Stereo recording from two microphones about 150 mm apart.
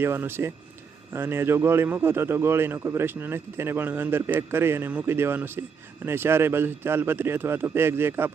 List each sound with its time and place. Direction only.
0.0 s a man's voice: 15° right (ahead or behind)